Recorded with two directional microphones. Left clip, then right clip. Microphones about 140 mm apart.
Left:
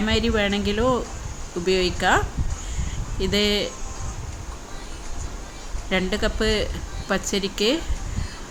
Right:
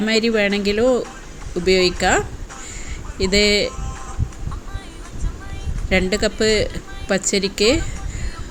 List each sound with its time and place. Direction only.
0.0 s speech: 15° right (ahead or behind)
5.9 s speech: 20° right (ahead or behind)